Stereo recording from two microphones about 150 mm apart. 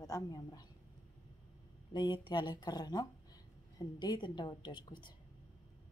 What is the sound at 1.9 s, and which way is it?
A woman's voice, 30° left (ahead or behind).